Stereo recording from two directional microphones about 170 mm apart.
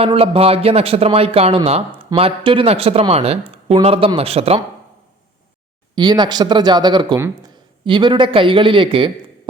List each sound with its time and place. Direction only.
0.0 s speech: 35° right (ahead or behind)
5.9 s speech: 25° right (ahead or behind)